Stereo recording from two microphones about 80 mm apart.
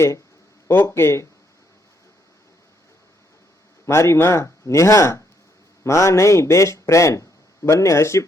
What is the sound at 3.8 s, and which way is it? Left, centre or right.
A man's voice, left.